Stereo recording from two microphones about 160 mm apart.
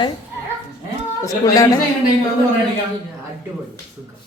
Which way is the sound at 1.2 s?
20° left (ahead or behind).